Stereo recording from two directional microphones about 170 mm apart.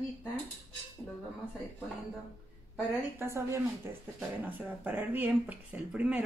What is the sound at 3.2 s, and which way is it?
Speech, 15° right (ahead or behind).